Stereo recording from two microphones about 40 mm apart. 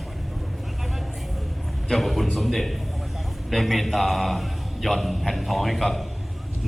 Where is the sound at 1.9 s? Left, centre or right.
Centre.